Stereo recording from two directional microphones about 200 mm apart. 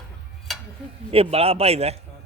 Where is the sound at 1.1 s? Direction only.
30° right (ahead or behind).